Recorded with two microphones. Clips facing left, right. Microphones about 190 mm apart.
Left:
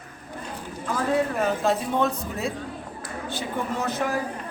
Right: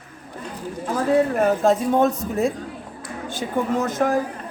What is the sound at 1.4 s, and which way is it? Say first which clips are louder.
Speech: right 5 dB; 45° right (ahead or behind).